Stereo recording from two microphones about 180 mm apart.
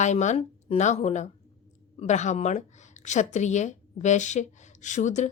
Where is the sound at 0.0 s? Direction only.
40° left (ahead or behind).